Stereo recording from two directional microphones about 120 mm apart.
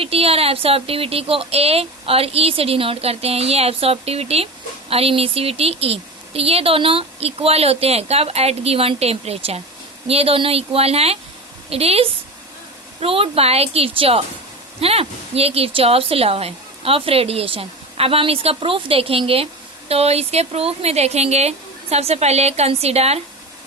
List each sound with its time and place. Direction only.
0.0 s a woman's voice: 55° right (ahead or behind)